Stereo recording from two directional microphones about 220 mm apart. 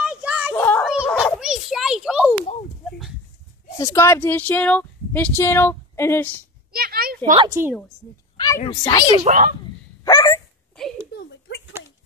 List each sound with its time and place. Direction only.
0.0 s children playing: 5° right (ahead or behind)
0.5 s children playing: 10° left (ahead or behind)
0.8 s a sound: 5° right (ahead or behind)
3.7 s speech: 15° left (ahead or behind)
6.7 s speech: 45° right (ahead or behind)
7.4 s a woman's voice: 15° right (ahead or behind)
8.6 s speech: 20° left (ahead or behind)
9.2 s speech: 40° right (ahead or behind)
10.0 s dog: 15° left (ahead or behind)
11.1 s a sound: 55° left (ahead or behind)